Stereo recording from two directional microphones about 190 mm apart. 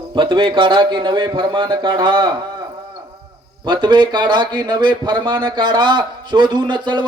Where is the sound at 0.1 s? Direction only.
25° right (ahead or behind).